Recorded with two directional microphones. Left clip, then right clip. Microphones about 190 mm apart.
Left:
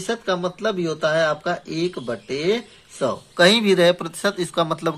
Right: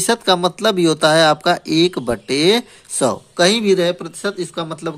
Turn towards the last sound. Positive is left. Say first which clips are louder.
# left 2 dB
turn(degrees=0)  # may be behind; listen again after turning